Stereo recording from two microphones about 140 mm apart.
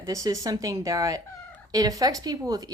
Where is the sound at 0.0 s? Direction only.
25° right (ahead or behind).